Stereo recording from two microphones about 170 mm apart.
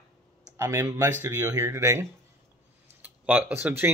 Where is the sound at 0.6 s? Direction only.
15° right (ahead or behind).